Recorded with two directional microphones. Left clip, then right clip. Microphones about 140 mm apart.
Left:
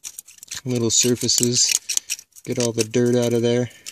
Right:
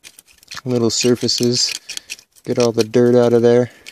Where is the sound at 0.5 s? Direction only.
40° right (ahead or behind).